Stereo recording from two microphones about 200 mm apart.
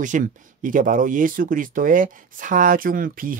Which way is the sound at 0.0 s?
40° right (ahead or behind).